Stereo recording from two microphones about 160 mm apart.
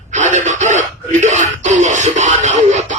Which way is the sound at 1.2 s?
50° right (ahead or behind).